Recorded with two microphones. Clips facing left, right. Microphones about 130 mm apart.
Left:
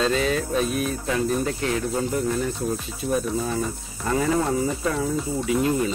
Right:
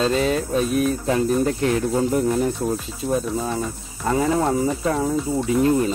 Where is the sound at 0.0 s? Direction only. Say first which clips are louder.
Right 2 dB; 35° right (ahead or behind).